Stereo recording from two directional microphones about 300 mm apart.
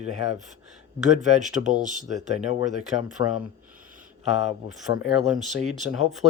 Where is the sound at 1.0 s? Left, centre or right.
Right.